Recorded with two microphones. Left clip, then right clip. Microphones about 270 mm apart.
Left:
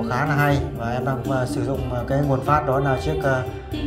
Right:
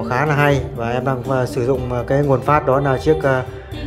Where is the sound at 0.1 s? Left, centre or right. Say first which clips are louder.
Right 5 dB; centre.